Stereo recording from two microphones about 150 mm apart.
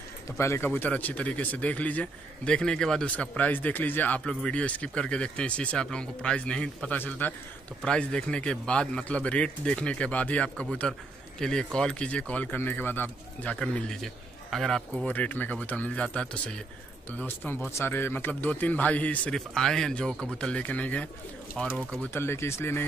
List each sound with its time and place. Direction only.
0.4 s speech: 15° left (ahead or behind)
22.0 s speech: 15° left (ahead or behind)